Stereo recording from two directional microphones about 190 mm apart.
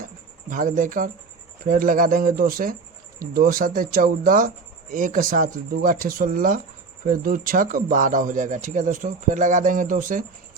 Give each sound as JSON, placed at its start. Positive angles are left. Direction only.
{"t": 0.5, "sound": "speech", "side_deg": -45}